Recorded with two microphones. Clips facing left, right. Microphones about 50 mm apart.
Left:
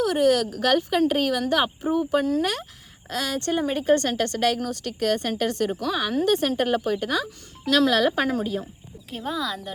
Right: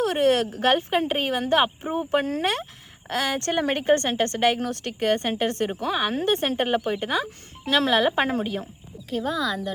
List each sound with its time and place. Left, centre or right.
0.0 s speech: right
3.8 s speech: right
9.0 s speech: centre